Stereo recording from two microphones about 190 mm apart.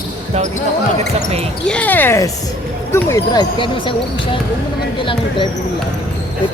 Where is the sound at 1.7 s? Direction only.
10° left (ahead or behind); by 3.9 s 25° left (ahead or behind).